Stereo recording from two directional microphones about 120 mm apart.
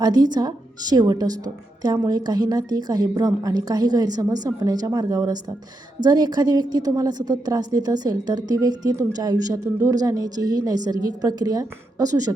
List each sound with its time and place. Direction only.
0.0 s a woman's voice: 35° right (ahead or behind)